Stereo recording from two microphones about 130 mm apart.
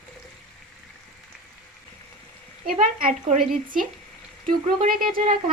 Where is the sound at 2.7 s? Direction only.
90° right.